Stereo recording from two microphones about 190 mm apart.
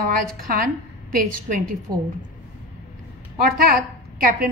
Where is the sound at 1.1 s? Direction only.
50° right (ahead or behind).